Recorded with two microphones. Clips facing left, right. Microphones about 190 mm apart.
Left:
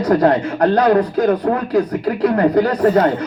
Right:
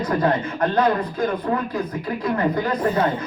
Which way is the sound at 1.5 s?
70° left (ahead or behind).